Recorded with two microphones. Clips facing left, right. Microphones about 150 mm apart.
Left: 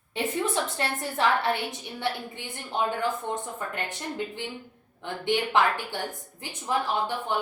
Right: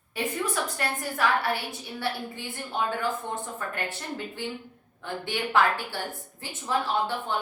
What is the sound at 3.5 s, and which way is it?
A woman's voice, 20° left (ahead or behind).